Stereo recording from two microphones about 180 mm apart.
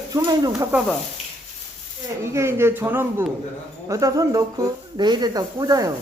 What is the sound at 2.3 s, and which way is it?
Speech, 15° right (ahead or behind).